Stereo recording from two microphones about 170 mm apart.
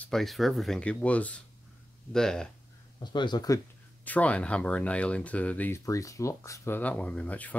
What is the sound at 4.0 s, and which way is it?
Speech, 10° left (ahead or behind).